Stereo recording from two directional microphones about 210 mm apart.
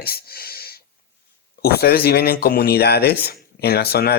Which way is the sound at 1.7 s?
50° left (ahead or behind).